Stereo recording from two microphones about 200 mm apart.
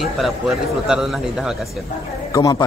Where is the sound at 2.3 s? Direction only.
15° left (ahead or behind).